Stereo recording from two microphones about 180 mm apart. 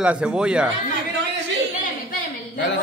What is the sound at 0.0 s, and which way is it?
Speech, 5° right (ahead or behind).